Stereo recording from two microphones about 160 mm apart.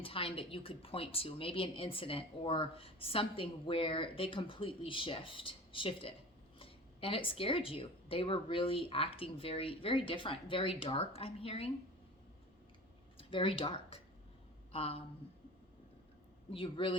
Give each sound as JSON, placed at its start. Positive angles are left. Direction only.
{"t": 0.0, "sound": "a woman's voice", "side_deg": 35}
{"t": 13.1, "sound": "speech", "side_deg": 35}
{"t": 16.5, "sound": "a woman's voice", "side_deg": 30}